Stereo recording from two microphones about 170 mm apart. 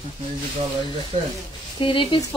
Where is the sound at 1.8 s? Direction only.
30° left (ahead or behind).